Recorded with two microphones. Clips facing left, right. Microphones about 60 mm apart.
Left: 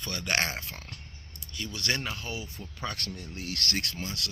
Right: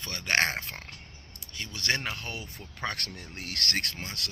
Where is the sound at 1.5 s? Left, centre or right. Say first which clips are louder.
Right 1 dB; right.